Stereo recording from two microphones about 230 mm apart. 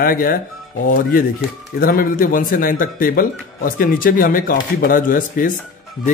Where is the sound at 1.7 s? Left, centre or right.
Left.